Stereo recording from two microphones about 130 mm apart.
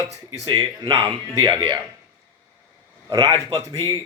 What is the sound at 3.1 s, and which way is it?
Speech, 35° right (ahead or behind).